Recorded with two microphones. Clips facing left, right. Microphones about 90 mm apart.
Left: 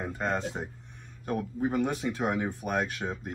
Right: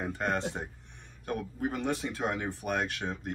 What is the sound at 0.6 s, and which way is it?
Speech, 5° left (ahead or behind).